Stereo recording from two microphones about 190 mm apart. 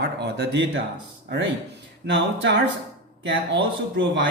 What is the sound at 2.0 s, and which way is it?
A man's voice, 70° right (ahead or behind).